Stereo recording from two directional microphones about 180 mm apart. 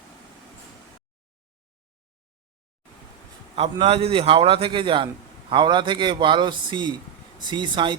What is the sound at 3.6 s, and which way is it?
A man's voice, 35° right (ahead or behind).